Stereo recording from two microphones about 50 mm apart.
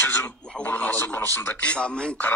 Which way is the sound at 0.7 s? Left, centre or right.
Left.